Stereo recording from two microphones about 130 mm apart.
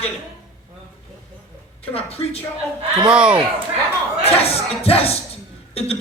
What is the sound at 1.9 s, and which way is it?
Speech, 50° left (ahead or behind).